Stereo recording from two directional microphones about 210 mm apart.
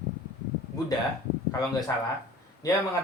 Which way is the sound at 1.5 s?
15° left (ahead or behind).